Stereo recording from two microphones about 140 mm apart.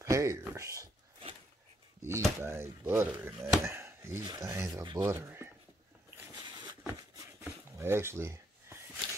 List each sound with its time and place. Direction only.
0.0 s speech: 20° right (ahead or behind)
2.0 s speech: 20° right (ahead or behind)
3.6 s speech: 20° right (ahead or behind)
5.1 s speech: 15° right (ahead or behind)
7.2 s a sound: 20° right (ahead or behind)